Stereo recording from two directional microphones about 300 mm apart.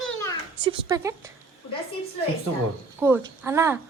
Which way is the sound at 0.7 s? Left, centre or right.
Centre.